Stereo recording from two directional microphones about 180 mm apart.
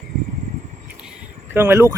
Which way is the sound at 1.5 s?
15° right (ahead or behind).